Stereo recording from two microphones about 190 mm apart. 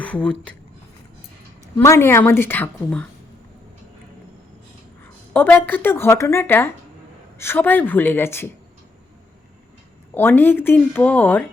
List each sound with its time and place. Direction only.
0.0 s speech: 5° left (ahead or behind)
1.8 s speech: 15° left (ahead or behind)
5.3 s speech: 10° left (ahead or behind)
10.2 s speech: 10° left (ahead or behind)